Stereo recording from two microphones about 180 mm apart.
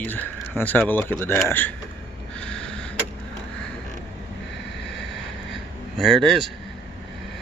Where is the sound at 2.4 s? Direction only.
5° left (ahead or behind).